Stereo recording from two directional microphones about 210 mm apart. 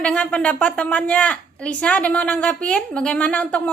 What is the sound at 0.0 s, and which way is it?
A woman's voice, 5° left (ahead or behind).